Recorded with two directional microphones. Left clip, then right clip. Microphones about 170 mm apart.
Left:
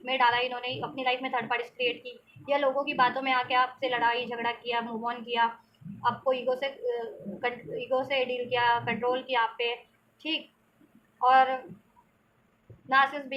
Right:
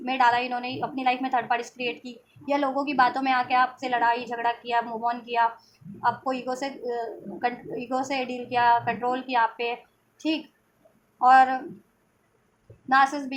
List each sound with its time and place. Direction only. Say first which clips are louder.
0.0 s a woman's voice: right 3 dB; 45° right (ahead or behind)
11.2 s a woman's voice: right 5 dB; 45° right (ahead or behind)
12.9 s a woman's voice: right 3 dB; 45° right (ahead or behind)